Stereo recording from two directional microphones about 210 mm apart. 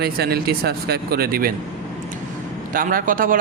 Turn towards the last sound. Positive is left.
turn(degrees=-40)  # may be behind; listen again after turning